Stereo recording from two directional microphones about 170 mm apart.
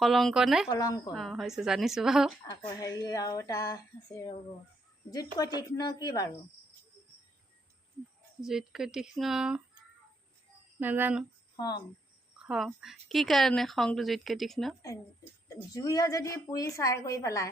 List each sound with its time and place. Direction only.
0.0 s a woman's voice: centre (ahead or behind)
0.7 s a woman's voice: 20° left (ahead or behind)
1.1 s a woman's voice: centre (ahead or behind)
2.5 s a woman's voice: 20° left (ahead or behind)
8.4 s a woman's voice: centre (ahead or behind)
10.8 s speech: 10° right (ahead or behind)
11.5 s speech: 25° left (ahead or behind)
12.4 s a woman's voice: centre (ahead or behind)
15.4 s a woman's voice: 20° left (ahead or behind)